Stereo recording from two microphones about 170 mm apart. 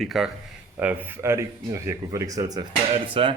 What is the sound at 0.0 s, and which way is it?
Speech, centre (ahead or behind).